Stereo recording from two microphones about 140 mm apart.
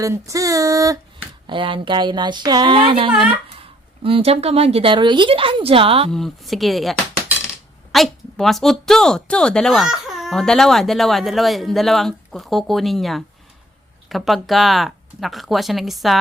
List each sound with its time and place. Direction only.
0.0 s female singing: 25° right (ahead or behind)
1.5 s speech: 35° right (ahead or behind)
6.1 s speech: centre (ahead or behind)
7.9 s speech: centre (ahead or behind)